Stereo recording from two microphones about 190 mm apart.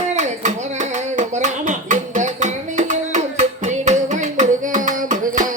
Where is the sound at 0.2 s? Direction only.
40° right (ahead or behind).